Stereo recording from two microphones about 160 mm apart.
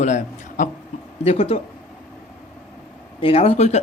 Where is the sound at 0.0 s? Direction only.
50° left (ahead or behind).